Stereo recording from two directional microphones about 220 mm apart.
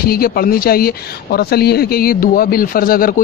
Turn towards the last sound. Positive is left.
turn(degrees=40)  # may be behind; listen again after turning